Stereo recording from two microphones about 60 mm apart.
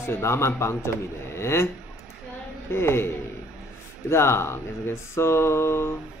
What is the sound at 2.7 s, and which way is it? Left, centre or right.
Speech, left.